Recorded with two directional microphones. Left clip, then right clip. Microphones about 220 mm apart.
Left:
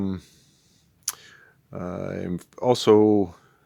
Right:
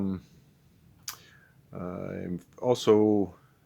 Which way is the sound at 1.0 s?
45° left (ahead or behind).